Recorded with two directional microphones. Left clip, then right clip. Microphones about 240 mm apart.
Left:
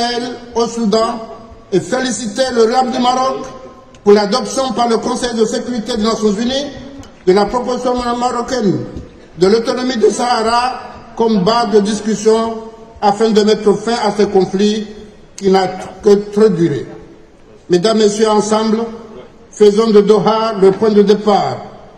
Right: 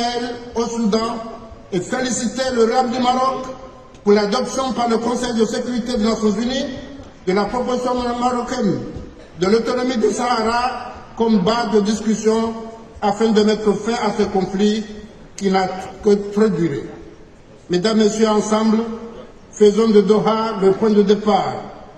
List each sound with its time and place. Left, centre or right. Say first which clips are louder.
0.6 s a man's voice: left 6 dB; left